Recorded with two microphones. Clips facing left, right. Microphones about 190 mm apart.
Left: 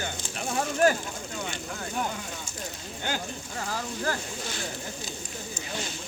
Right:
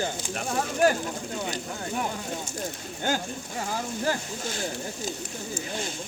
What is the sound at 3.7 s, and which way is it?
Speech, 20° right (ahead or behind).